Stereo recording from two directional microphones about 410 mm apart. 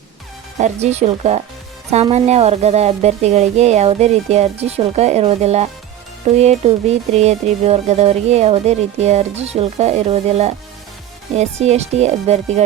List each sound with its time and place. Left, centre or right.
0.6 s speech: centre